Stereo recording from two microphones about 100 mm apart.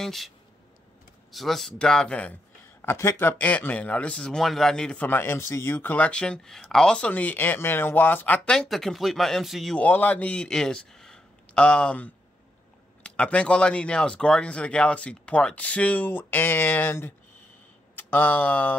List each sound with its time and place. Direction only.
0.0 s speech: centre (ahead or behind)
1.3 s speech: centre (ahead or behind)
2.8 s speech: 25° left (ahead or behind)
8.5 s speech: 5° left (ahead or behind)
9.8 s a man's voice: 15° left (ahead or behind)